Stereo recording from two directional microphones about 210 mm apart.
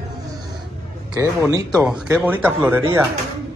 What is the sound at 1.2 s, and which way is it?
Speech, 15° right (ahead or behind).